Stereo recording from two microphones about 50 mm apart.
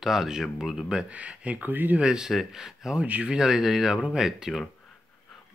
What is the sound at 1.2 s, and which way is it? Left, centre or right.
Speech, right.